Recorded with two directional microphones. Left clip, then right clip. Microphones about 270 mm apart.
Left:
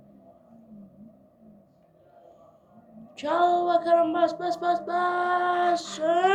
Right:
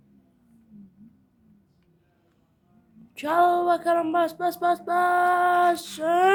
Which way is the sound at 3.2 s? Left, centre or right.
Right.